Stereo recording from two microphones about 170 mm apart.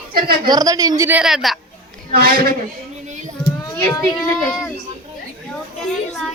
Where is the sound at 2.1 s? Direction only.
60° right (ahead or behind).